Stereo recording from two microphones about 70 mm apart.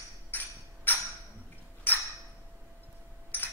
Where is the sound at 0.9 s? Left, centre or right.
Left.